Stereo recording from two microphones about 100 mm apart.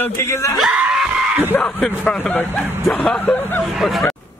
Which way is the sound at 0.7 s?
10° right (ahead or behind).